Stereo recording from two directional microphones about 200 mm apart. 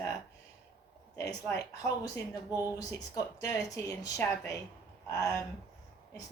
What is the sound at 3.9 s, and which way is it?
Speech, 20° left (ahead or behind).